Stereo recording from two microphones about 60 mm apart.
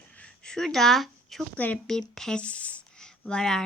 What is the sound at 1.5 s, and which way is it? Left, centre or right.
Speech, left.